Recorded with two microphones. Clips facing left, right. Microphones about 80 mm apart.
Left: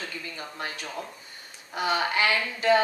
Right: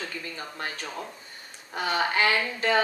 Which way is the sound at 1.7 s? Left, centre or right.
Right.